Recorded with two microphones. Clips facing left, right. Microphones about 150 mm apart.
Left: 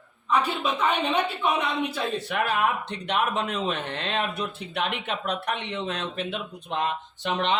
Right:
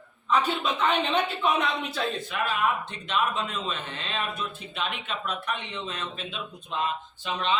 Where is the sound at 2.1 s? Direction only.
70° left (ahead or behind).